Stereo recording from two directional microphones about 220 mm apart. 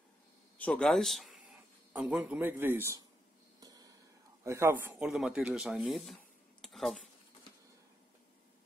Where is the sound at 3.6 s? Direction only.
15° right (ahead or behind).